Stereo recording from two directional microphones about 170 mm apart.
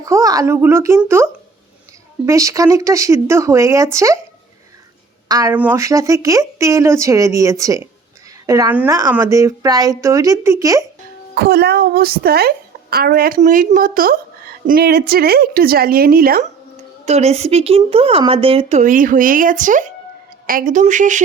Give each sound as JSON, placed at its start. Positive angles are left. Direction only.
{"t": 0.0, "sound": "speech", "side_deg": -20}
{"t": 5.5, "sound": "speech", "side_deg": -10}
{"t": 11.3, "sound": "a woman's voice", "side_deg": -70}
{"t": 17.1, "sound": "speech", "side_deg": -40}